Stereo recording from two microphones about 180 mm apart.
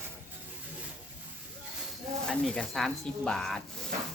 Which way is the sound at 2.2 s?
5° left (ahead or behind).